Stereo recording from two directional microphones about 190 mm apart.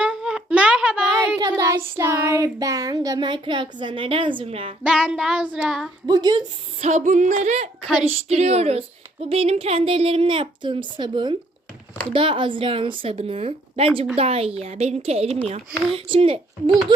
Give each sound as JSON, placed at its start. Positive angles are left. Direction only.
{"t": 0.0, "sound": "a sound", "side_deg": -5}
{"t": 1.4, "sound": "child singing", "side_deg": -20}
{"t": 4.8, "sound": "child singing", "side_deg": -5}
{"t": 6.1, "sound": "child singing", "side_deg": -20}
{"t": 6.8, "sound": "a woman's voice", "side_deg": -40}
{"t": 9.3, "sound": "child singing", "side_deg": -30}
{"t": 14.2, "sound": "a woman's voice", "side_deg": -30}
{"t": 16.0, "sound": "child singing", "side_deg": -30}